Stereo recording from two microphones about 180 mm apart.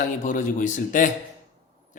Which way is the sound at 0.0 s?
45° left (ahead or behind).